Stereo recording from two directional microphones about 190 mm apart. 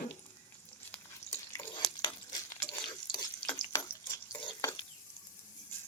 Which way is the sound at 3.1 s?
20° left (ahead or behind).